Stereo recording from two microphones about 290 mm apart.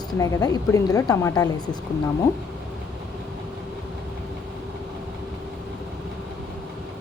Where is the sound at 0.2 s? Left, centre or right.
Centre.